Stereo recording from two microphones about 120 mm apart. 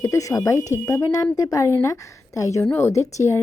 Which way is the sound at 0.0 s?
30° left (ahead or behind).